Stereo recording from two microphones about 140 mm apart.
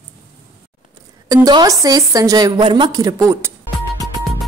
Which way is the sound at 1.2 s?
25° right (ahead or behind).